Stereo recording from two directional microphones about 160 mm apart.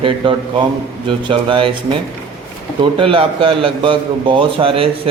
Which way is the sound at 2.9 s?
35° right (ahead or behind).